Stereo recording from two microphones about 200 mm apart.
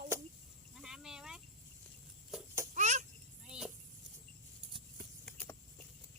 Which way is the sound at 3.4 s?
5° right (ahead or behind).